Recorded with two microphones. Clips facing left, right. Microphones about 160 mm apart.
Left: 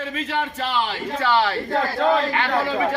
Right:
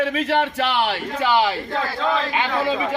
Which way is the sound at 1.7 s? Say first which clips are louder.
Left 6 dB; 50° left (ahead or behind).